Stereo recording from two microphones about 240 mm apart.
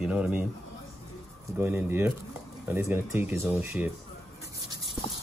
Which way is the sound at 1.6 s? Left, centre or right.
Centre.